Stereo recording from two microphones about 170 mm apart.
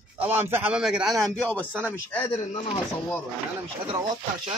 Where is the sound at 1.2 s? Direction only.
10° left (ahead or behind).